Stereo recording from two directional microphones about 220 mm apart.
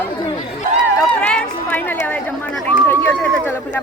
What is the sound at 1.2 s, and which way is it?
Speech, 5° left (ahead or behind).